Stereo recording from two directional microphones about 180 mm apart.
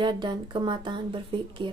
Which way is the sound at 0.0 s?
25° right (ahead or behind).